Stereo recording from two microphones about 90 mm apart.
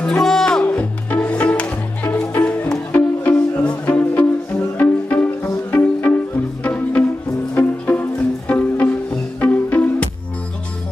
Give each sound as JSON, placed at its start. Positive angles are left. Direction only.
{"t": 0.0, "sound": "music", "side_deg": 5}